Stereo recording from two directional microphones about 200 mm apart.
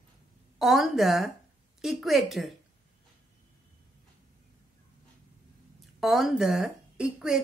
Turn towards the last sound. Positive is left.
turn(degrees=-5)  # may be behind; listen again after turning